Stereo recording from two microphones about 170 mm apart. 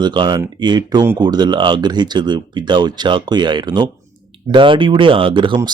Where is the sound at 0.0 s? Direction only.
25° right (ahead or behind).